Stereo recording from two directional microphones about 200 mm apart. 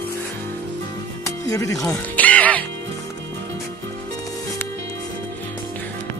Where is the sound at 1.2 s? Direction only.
15° left (ahead or behind).